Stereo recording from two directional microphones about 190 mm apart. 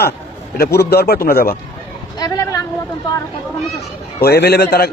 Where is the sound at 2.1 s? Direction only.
20° left (ahead or behind).